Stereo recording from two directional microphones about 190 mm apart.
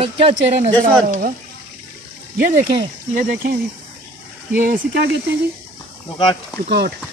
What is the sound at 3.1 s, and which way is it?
Speech, 45° right (ahead or behind).